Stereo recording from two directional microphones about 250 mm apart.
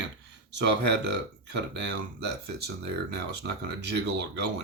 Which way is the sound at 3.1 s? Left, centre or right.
Right.